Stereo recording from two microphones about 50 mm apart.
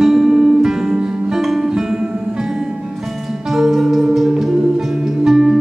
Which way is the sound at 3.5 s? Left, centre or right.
Centre.